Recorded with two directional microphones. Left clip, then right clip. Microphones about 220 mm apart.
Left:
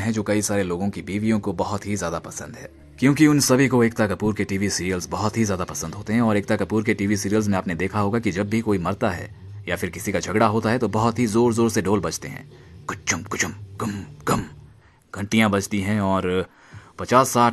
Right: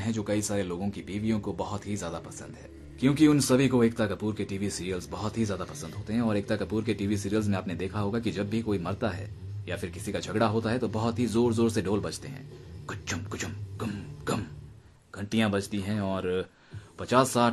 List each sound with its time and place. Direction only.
0.0 s speech: 40° left (ahead or behind)